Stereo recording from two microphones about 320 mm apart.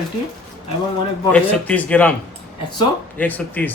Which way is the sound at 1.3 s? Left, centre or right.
Centre.